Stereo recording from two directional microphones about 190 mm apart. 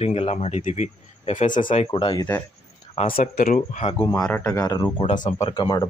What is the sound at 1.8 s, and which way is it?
Speech, 30° left (ahead or behind).